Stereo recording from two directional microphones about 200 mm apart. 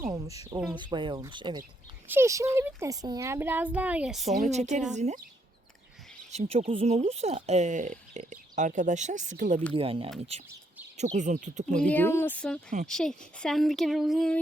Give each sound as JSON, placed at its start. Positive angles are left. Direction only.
{"t": 0.3, "sound": "a child's voice", "side_deg": -15}
{"t": 4.4, "sound": "speech", "side_deg": -35}
{"t": 6.3, "sound": "speech", "side_deg": -30}
{"t": 9.7, "sound": "speech", "side_deg": -25}
{"t": 11.9, "sound": "speech", "side_deg": 10}